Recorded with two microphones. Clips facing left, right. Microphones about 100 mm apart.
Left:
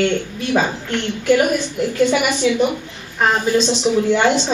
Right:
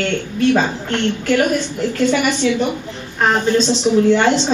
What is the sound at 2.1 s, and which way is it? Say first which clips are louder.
A woman's voice: right 1 dB; 10° left (ahead or behind).